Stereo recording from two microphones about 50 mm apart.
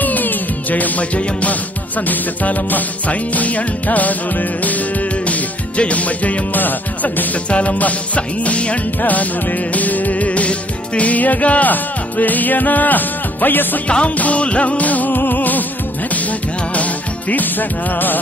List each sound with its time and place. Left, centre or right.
0.0 s music: left
7.4 s music: left
13.8 s music: left